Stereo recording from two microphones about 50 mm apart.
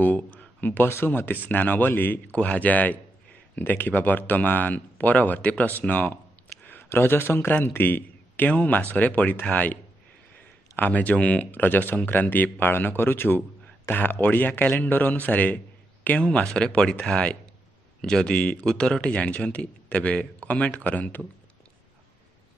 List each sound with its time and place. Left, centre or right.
0.0 s a sound: left
0.8 s a man's voice: left
2.3 s a man's voice: left
10.8 s a man's voice: left
11.6 s a man's voice: left